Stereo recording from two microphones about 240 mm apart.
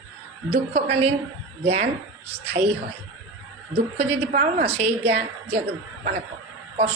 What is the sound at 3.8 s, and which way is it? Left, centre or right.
A woman's voice, right.